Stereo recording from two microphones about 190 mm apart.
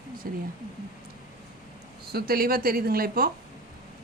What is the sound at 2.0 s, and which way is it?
Speech, 55° right (ahead or behind).